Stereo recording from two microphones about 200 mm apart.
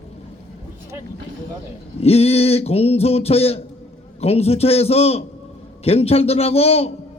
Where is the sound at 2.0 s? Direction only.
30° left (ahead or behind).